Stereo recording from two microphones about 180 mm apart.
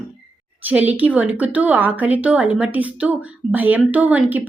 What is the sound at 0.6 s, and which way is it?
A woman's voice, 10° right (ahead or behind).